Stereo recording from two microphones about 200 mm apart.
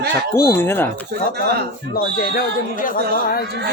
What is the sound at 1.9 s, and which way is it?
Speech, 50° left (ahead or behind).